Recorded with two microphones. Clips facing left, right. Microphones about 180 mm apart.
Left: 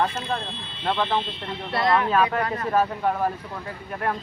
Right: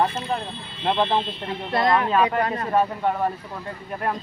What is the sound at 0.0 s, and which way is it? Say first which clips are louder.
Speech: right 2 dB; 15° right (ahead or behind).